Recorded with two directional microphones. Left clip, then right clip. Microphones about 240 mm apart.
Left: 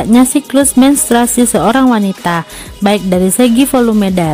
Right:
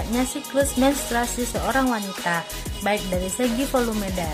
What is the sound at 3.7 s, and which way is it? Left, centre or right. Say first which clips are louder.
Speech: left 12 dB; left.